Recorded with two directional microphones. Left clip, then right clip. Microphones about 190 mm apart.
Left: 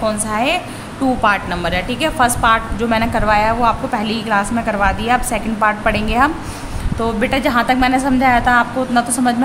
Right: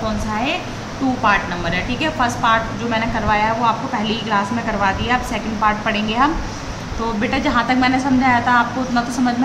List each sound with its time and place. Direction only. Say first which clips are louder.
0.0 s a woman's voice: left 4 dB; 50° left (ahead or behind)